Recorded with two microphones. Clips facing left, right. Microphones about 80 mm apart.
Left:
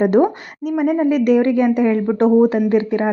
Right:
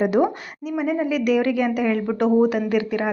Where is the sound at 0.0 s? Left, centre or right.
Left.